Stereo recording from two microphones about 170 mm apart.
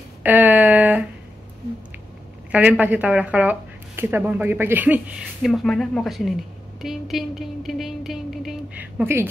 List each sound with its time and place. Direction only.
0.2 s a sound: 10° right (ahead or behind)
2.5 s speech: 10° right (ahead or behind)
5.4 s a woman's voice: centre (ahead or behind)